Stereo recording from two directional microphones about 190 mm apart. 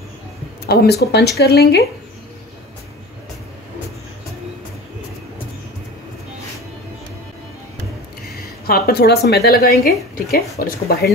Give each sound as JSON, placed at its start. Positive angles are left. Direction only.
{"t": 0.7, "sound": "a woman's voice", "side_deg": 60}
{"t": 8.6, "sound": "a woman's voice", "side_deg": 55}